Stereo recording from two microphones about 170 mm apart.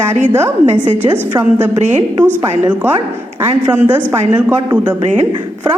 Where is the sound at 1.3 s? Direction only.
15° right (ahead or behind).